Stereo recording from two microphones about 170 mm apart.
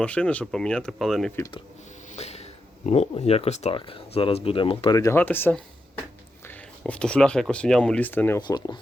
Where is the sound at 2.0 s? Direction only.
40° left (ahead or behind).